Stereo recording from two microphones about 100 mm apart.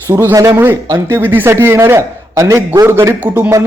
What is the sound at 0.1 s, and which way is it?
A man's voice, 25° right (ahead or behind).